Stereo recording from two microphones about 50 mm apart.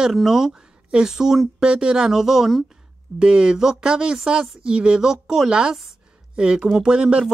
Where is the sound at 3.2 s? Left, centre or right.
Centre.